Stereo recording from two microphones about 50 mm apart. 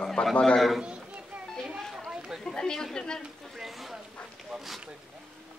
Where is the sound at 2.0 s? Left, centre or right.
Centre.